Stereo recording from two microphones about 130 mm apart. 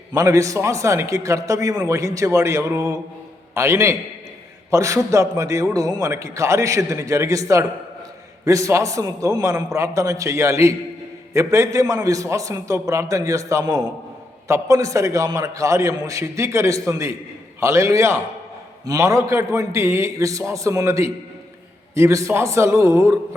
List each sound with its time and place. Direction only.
0.1 s a man's voice: 25° right (ahead or behind)